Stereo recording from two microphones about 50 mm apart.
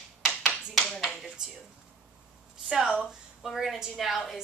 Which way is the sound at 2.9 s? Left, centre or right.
Centre.